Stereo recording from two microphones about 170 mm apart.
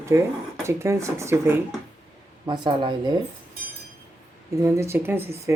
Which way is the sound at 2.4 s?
25° right (ahead or behind).